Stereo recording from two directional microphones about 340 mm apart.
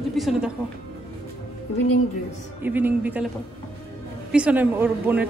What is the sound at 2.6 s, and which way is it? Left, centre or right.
Speech, centre.